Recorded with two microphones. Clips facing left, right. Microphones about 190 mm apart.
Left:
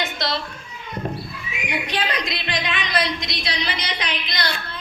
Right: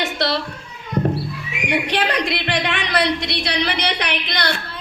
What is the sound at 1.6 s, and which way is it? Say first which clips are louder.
Child singing: right 5 dB; 70° right (ahead or behind).